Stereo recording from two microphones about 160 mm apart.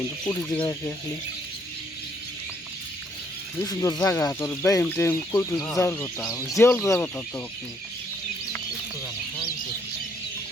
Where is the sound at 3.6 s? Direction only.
25° left (ahead or behind).